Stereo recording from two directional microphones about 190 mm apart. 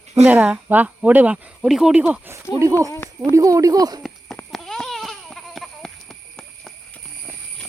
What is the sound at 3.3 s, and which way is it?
Speech, 15° right (ahead or behind).